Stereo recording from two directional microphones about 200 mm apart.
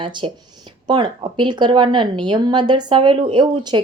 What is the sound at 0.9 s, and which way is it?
A woman's voice, 20° right (ahead or behind).